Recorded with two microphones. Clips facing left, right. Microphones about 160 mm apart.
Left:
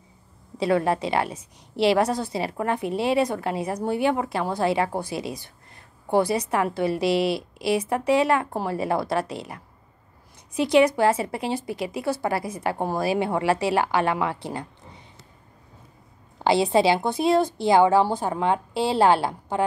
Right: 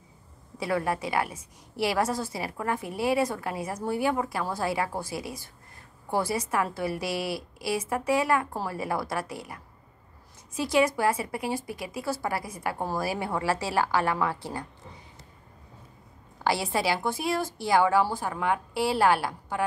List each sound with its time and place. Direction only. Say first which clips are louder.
0.6 s a woman's voice: left 6 dB; 25° left (ahead or behind)
16.4 s a woman's voice: left 7 dB; 20° left (ahead or behind)